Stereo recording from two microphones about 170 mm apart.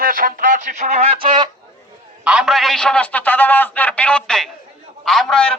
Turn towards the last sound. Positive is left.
turn(degrees=5)  # may be behind; listen again after turning